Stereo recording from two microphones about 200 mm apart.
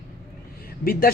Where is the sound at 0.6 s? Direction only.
45° left (ahead or behind).